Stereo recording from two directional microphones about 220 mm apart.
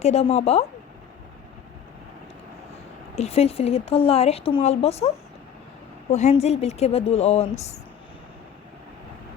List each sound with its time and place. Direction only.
0.0 s speech: 30° left (ahead or behind)
3.2 s speech: 30° left (ahead or behind)